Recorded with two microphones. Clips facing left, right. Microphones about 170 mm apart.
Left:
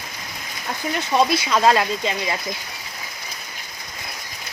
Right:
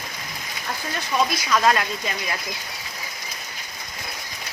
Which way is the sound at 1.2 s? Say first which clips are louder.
Left 3 dB; 30° left (ahead or behind).